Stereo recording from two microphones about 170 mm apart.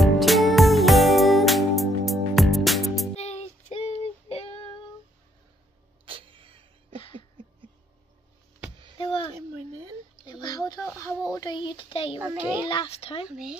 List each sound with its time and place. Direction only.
0.0 s music: centre (ahead or behind)
3.2 s child singing: 40° left (ahead or behind)
6.0 s a sound: 30° right (ahead or behind)
8.9 s a sound: 30° left (ahead or behind)
12.2 s a child's voice: 10° right (ahead or behind)
12.6 s a child's voice: 30° left (ahead or behind)